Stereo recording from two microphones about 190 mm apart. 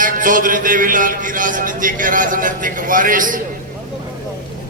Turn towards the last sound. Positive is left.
turn(degrees=-45)  # may be behind; listen again after turning